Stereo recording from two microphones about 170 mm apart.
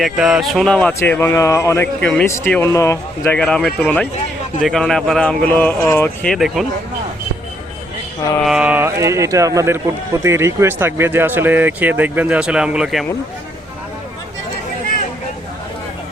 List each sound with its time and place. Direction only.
0.0 s speech: 5° right (ahead or behind); by 3.3 s 20° left (ahead or behind)
3.3 s a man's voice: 5° left (ahead or behind)
6.3 s a man's voice: centre (ahead or behind)
8.4 s speech: 5° right (ahead or behind)